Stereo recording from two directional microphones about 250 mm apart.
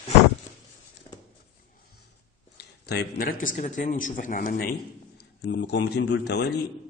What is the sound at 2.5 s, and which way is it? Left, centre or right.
Speech, left.